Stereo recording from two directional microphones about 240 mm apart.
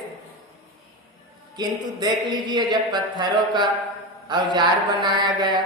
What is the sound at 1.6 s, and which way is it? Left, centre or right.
Speech, centre.